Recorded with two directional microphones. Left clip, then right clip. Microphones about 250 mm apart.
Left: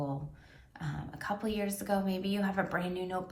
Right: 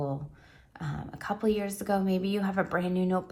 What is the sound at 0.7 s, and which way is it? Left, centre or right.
A woman's voice, right.